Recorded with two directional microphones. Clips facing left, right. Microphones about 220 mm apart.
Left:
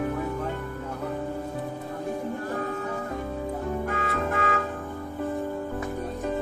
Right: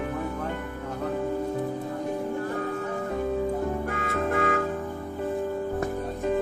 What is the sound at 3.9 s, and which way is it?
Music, 50° right (ahead or behind).